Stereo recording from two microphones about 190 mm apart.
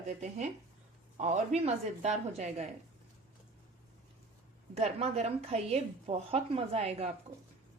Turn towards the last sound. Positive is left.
turn(degrees=-35)  # may be behind; listen again after turning